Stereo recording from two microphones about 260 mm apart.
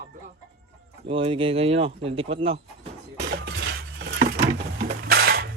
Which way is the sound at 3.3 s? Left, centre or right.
Right.